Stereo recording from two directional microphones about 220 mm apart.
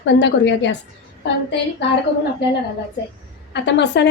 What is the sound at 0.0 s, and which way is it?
Speech, 55° left (ahead or behind).